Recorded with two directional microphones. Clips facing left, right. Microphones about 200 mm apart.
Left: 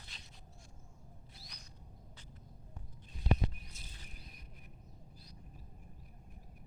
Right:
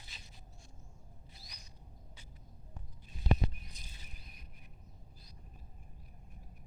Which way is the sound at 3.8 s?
15° right (ahead or behind).